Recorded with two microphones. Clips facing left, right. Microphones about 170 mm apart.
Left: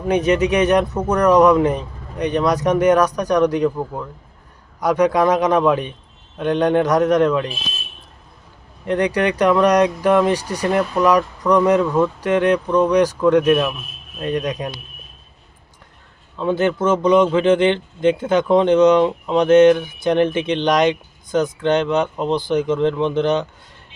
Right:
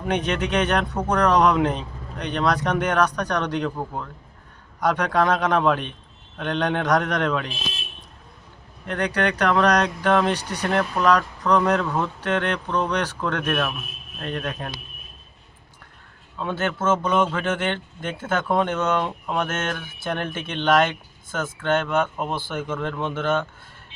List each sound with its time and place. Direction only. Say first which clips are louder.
0.1 s speech: left 7 dB; 10° left (ahead or behind)
4.8 s speech: left 5 dB; 10° left (ahead or behind)
9.1 s speech: left 3 dB; 10° left (ahead or behind)
16.5 s speech: left 6 dB; 15° left (ahead or behind)